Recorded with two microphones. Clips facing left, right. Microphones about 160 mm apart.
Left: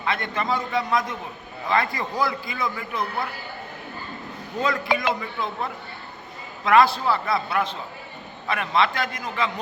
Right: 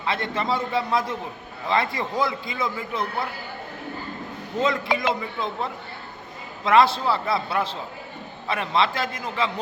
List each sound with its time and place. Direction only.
0.0 s a man's voice: 30° right (ahead or behind)
4.6 s a man's voice: 25° right (ahead or behind)
6.7 s a man's voice: 25° right (ahead or behind)